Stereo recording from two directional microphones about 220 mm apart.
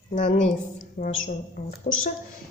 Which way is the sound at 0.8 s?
35° left (ahead or behind).